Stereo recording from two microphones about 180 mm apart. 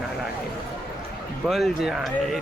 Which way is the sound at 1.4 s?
Centre (ahead or behind).